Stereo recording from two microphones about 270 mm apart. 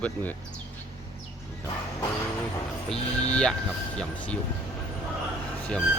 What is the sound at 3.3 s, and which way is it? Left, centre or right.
Speech, centre.